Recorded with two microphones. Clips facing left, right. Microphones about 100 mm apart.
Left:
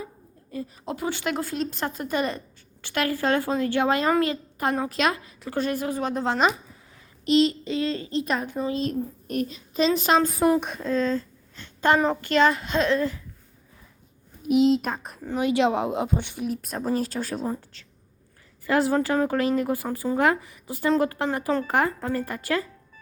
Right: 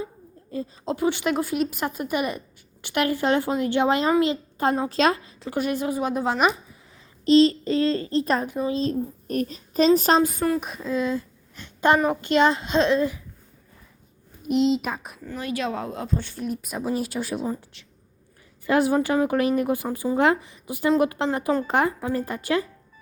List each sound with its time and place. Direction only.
0.5 s a woman's voice: 25° right (ahead or behind)
5.5 s speech: 15° right (ahead or behind)
7.3 s a child's voice: 35° right (ahead or behind)
8.4 s a child's voice: 20° right (ahead or behind); by 10.2 s 40° right (ahead or behind)
10.6 s speech: centre (ahead or behind); by 13.1 s 20° right (ahead or behind)
14.4 s speech: centre (ahead or behind)
15.2 s speech: 20° left (ahead or behind)
16.4 s speech: centre (ahead or behind)
18.6 s speech: 20° right (ahead or behind)